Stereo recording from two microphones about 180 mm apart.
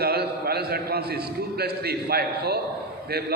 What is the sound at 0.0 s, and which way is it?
A man's voice, 60° right (ahead or behind).